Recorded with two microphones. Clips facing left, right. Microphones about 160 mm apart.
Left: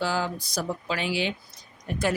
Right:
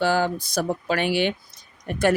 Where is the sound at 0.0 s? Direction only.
65° right (ahead or behind).